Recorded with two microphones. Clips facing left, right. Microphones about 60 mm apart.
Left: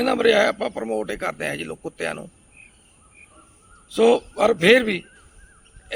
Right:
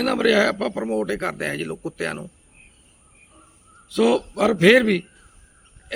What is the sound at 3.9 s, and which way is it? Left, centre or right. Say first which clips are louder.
Speech: left 2 dB; centre.